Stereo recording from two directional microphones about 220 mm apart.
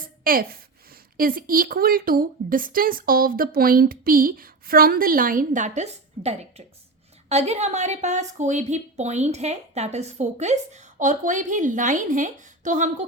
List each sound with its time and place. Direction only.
0.3 s a woman's voice: 40° right (ahead or behind)